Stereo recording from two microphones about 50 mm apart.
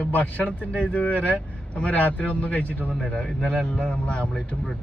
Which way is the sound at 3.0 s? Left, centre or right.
Centre.